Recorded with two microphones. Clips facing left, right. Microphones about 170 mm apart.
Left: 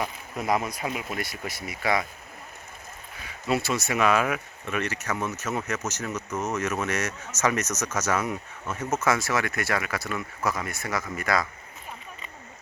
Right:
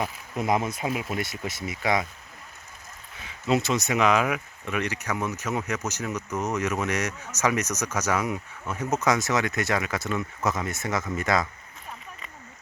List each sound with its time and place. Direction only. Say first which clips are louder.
0.3 s speech: right 1 dB; 20° right (ahead or behind)
3.4 s speech: right 2 dB; 20° right (ahead or behind)